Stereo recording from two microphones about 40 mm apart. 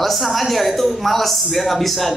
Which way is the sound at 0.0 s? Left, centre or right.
Centre.